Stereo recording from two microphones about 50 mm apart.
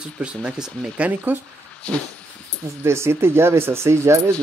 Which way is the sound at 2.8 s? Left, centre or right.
Right.